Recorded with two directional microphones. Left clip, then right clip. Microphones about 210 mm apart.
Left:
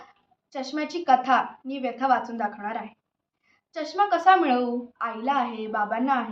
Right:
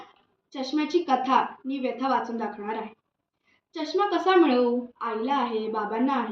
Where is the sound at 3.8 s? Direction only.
15° left (ahead or behind).